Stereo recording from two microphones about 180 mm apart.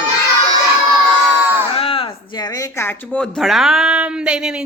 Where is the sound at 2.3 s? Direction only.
20° left (ahead or behind).